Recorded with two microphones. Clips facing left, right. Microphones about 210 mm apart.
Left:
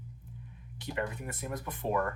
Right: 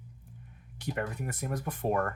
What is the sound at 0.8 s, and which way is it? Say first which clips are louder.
Speech: right 1 dB; 50° right (ahead or behind).